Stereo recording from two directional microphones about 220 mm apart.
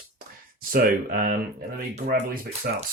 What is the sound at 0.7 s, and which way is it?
Speech, 40° right (ahead or behind).